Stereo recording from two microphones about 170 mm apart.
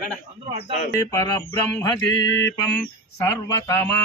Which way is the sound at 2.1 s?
90° left.